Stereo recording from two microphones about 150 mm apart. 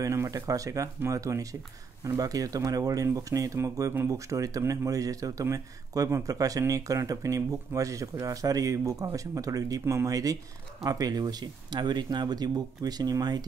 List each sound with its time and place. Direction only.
0.0 s speech: 20° right (ahead or behind)